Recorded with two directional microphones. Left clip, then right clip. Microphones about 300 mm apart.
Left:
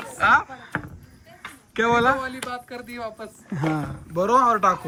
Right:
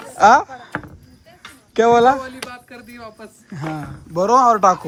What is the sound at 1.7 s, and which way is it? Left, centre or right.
A man's voice, centre.